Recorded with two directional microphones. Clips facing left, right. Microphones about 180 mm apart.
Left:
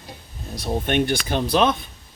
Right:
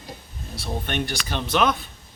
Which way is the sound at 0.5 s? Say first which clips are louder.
Left 6 dB; 40° left (ahead or behind).